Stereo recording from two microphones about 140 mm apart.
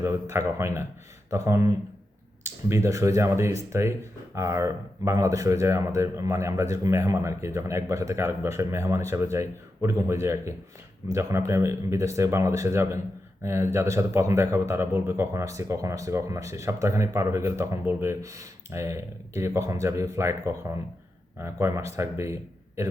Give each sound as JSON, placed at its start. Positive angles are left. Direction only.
{"t": 0.0, "sound": "a man's voice", "side_deg": -20}